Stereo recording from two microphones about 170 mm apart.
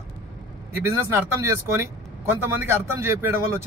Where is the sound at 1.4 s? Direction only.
15° right (ahead or behind).